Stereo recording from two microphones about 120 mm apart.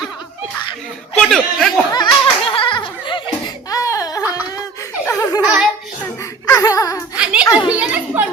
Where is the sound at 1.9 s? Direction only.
45° left (ahead or behind).